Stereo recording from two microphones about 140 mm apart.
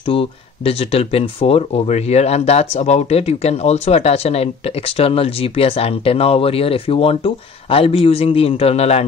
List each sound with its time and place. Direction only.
0.0 s speech: 40° left (ahead or behind)